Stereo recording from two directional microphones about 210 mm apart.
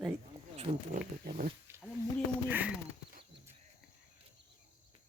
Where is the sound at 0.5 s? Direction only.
30° right (ahead or behind).